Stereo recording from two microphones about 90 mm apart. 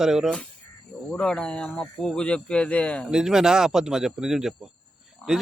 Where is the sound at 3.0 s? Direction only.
5° right (ahead or behind).